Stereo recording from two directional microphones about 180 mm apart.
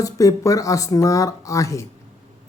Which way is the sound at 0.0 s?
20° left (ahead or behind).